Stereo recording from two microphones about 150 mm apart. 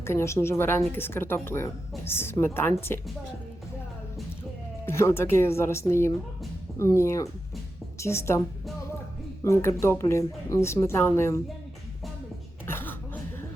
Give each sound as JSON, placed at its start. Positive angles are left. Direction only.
{"t": 0.0, "sound": "speech", "side_deg": 20}
{"t": 4.9, "sound": "a woman's voice", "side_deg": 15}
{"t": 9.4, "sound": "speech", "side_deg": 20}
{"t": 12.6, "sound": "a sound", "side_deg": 15}